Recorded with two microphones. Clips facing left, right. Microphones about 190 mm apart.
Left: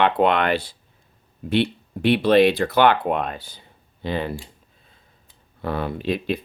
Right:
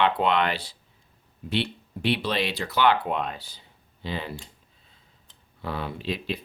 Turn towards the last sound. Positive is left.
turn(degrees=55)  # may be behind; listen again after turning